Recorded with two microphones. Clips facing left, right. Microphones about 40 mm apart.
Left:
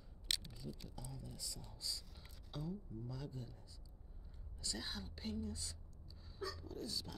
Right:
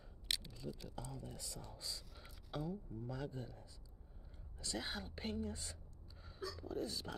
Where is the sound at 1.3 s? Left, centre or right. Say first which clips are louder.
Right 2 dB; right.